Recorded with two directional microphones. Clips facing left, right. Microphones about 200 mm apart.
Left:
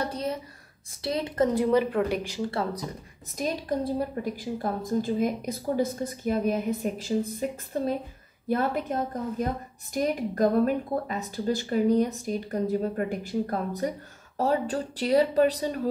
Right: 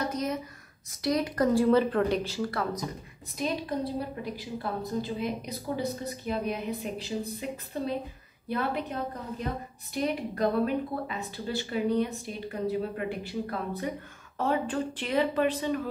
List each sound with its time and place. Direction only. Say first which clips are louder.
0.0 s a sound: even; 30° left (ahead or behind)
1.0 s speech: even; 25° left (ahead or behind)
3.3 s a woman's voice: left 2 dB; 45° left (ahead or behind)